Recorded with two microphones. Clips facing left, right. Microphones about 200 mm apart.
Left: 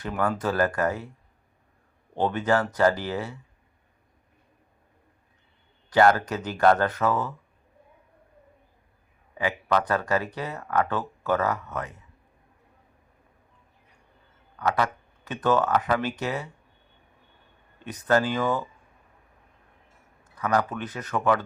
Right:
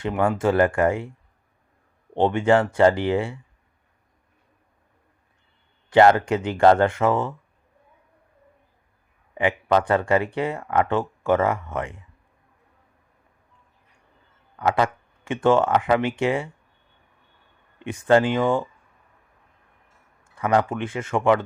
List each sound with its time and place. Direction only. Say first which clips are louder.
0.0 s speech: right 5 dB; 25° right (ahead or behind)
2.1 s speech: right 5 dB; 25° right (ahead or behind)
5.9 s speech: right 4 dB; 25° right (ahead or behind)
9.4 s speech: right 5 dB; 25° right (ahead or behind)
15.3 s speech: right 4 dB; 25° right (ahead or behind)
17.7 s speech: right 5 dB; 25° right (ahead or behind)
20.2 s speech: right 4 dB; 30° right (ahead or behind)